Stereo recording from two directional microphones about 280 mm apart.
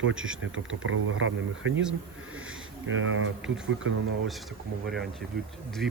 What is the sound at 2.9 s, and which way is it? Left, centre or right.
Speech, right.